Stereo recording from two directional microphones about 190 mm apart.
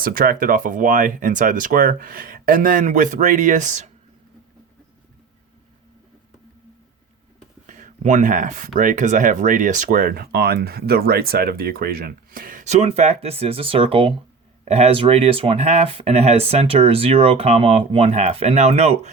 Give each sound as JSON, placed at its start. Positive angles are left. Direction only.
{"t": 0.0, "sound": "speech", "side_deg": -50}
{"t": 7.7, "sound": "speech", "side_deg": -40}